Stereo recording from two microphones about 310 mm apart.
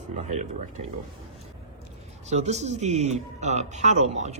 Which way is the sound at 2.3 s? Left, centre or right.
Right.